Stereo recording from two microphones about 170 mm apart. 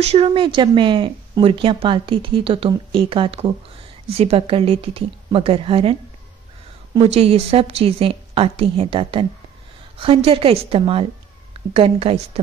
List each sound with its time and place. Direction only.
0.0 s speech: 35° right (ahead or behind)
7.0 s speech: 35° right (ahead or behind)